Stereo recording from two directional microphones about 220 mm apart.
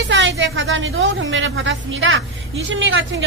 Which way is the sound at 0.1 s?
55° right (ahead or behind).